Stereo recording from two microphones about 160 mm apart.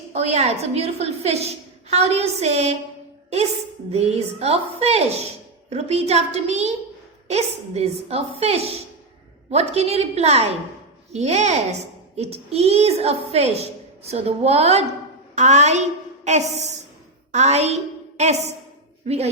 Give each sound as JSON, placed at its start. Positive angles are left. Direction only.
{"t": 0.1, "sound": "a woman's voice", "side_deg": -40}
{"t": 3.9, "sound": "a woman's voice", "side_deg": -40}